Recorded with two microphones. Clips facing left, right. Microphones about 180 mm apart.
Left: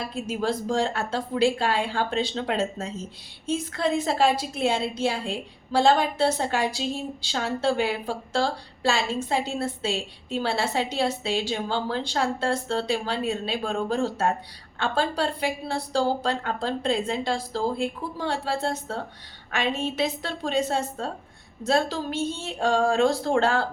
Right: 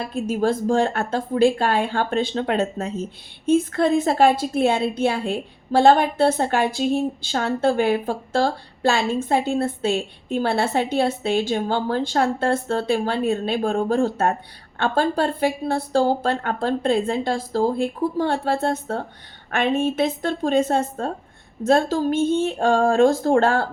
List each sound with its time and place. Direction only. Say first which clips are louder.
0.1 s a woman's voice: right 8 dB; 50° right (ahead or behind)